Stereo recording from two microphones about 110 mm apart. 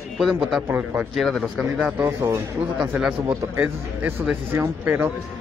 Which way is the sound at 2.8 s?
5° right (ahead or behind).